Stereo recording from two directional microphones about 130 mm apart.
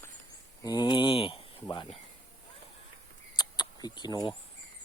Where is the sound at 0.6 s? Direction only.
30° left (ahead or behind).